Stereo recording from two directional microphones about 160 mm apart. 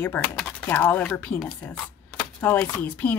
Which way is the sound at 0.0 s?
10° left (ahead or behind).